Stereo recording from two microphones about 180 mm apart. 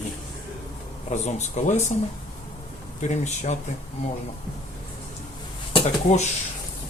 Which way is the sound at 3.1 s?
40° left (ahead or behind).